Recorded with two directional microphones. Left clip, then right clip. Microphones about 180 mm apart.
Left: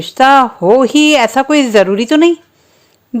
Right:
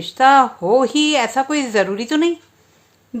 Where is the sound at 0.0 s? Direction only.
40° left (ahead or behind).